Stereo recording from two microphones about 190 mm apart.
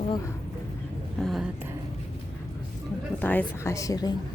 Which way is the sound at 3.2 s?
10° left (ahead or behind).